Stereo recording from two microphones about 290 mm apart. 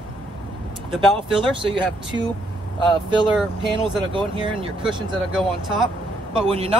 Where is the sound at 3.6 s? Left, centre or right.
Centre.